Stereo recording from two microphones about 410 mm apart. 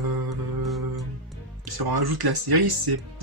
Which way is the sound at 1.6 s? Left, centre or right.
Right.